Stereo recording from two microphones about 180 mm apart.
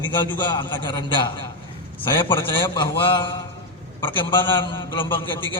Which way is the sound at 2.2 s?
25° left (ahead or behind).